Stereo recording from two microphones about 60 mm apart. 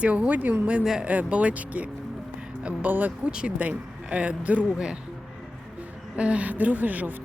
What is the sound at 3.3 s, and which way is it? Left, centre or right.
Speech, centre.